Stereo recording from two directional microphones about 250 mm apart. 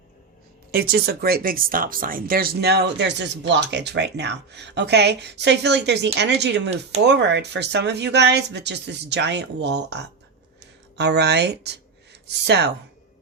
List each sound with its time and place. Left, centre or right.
0.7 s speech: right